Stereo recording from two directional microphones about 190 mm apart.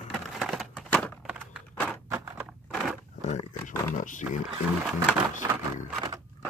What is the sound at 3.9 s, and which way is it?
Speech, 45° left (ahead or behind).